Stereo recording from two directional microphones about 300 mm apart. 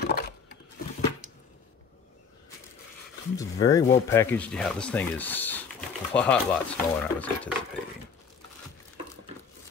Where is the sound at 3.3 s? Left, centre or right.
Centre.